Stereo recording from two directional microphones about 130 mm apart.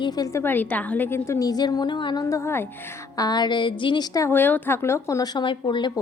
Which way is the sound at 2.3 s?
20° left (ahead or behind).